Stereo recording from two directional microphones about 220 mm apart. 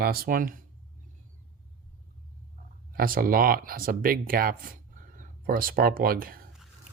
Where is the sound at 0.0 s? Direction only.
45° right (ahead or behind).